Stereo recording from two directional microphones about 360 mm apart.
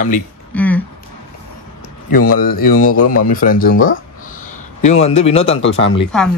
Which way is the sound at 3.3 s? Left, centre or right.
Left.